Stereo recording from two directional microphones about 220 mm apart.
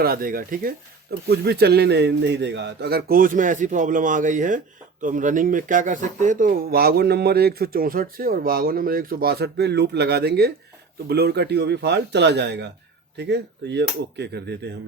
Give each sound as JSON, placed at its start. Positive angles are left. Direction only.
{"t": 0.0, "sound": "a man's voice", "side_deg": -40}